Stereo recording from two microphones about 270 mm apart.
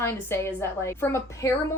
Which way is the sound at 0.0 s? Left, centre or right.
Centre.